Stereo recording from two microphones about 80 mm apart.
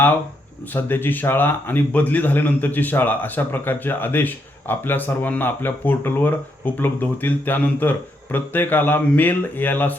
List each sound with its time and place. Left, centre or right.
0.7 s speech: left